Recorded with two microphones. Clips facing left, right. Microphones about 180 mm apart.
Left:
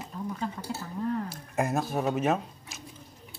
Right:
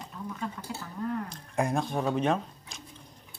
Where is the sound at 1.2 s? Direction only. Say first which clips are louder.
Even; 5° left (ahead or behind).